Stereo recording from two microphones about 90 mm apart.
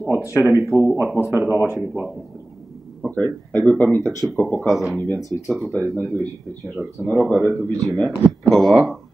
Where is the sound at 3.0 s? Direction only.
15° left (ahead or behind).